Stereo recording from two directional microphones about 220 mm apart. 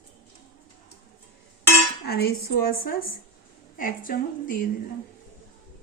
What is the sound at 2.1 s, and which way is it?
A woman's voice, 45° left (ahead or behind).